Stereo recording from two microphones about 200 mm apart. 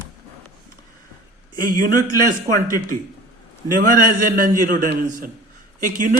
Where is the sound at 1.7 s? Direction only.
45° right (ahead or behind).